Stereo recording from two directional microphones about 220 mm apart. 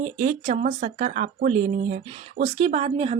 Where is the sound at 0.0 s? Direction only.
30° right (ahead or behind).